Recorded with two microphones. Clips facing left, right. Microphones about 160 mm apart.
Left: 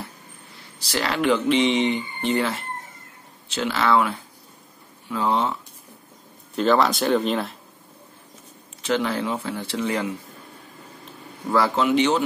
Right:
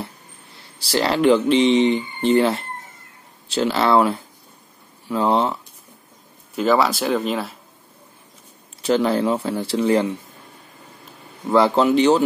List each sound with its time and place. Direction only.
0.7 s speech: 30° right (ahead or behind)
6.5 s speech: 5° right (ahead or behind)
8.8 s speech: 35° right (ahead or behind)
11.5 s speech: 30° right (ahead or behind)